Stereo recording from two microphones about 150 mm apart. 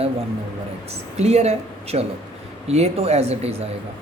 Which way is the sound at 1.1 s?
45° right (ahead or behind).